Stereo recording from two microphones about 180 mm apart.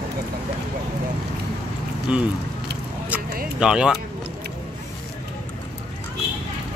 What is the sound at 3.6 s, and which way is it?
Speech, 5° right (ahead or behind).